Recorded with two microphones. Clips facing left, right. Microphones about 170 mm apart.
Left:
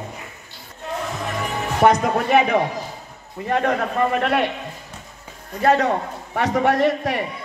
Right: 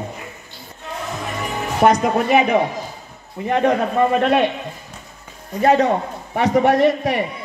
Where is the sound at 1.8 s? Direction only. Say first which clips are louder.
Right 1 dB; 10° right (ahead or behind).